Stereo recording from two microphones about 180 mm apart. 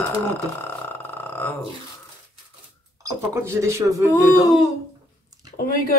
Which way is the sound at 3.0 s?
15° right (ahead or behind).